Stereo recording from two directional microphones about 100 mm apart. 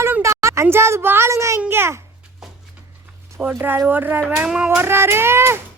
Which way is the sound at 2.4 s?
5° right (ahead or behind).